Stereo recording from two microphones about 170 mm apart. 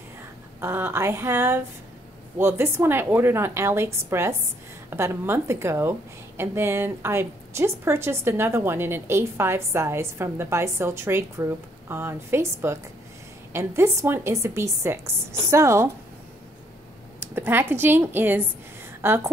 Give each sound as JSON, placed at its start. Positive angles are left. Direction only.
{"t": 0.6, "sound": "a woman's voice", "side_deg": -15}
{"t": 17.2, "sound": "a woman's voice", "side_deg": -15}